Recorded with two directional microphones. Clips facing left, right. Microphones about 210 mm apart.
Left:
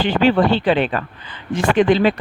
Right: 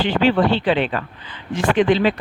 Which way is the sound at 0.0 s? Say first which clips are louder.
Left 2 dB; 45° left (ahead or behind).